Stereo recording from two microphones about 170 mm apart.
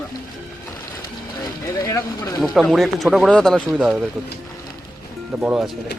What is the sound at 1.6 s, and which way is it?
Speech, 15° left (ahead or behind).